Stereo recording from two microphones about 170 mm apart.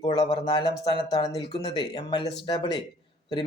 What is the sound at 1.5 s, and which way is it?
Speech, 25° left (ahead or behind).